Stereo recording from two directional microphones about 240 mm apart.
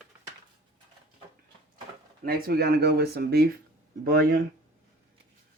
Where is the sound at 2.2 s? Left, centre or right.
Right.